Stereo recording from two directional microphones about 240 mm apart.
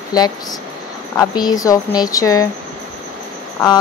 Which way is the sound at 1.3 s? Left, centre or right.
Centre.